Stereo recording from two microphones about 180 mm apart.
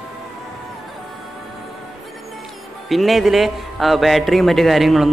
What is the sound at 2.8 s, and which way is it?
A man's voice, centre (ahead or behind).